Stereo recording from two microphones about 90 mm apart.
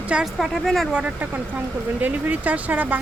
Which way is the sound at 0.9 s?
15° right (ahead or behind).